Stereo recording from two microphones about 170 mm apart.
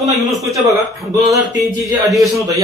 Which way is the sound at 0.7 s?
20° right (ahead or behind).